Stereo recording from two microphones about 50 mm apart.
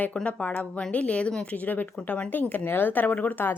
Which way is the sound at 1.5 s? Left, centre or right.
Left.